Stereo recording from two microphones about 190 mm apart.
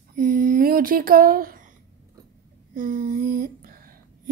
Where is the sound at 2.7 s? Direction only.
45° right (ahead or behind).